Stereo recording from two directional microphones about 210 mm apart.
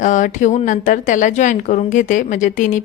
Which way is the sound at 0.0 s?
35° left (ahead or behind).